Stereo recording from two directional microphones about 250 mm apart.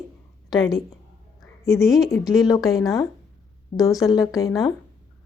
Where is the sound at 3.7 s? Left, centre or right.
Left.